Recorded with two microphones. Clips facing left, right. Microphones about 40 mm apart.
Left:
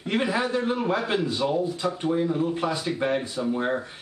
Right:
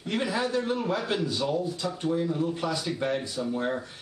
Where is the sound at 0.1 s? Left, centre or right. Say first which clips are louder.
Left 3 dB; left.